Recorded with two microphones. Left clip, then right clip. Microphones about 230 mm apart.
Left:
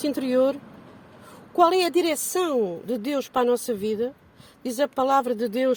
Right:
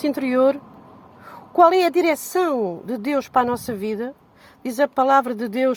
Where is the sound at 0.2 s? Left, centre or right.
Centre.